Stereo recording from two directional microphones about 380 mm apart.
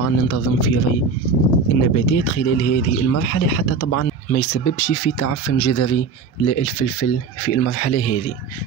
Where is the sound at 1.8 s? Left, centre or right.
Left.